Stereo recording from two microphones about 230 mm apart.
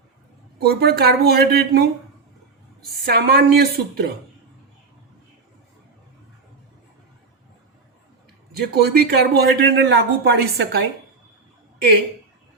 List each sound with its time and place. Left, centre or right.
0.6 s speech: right
3.0 s speech: right
8.5 s speech: right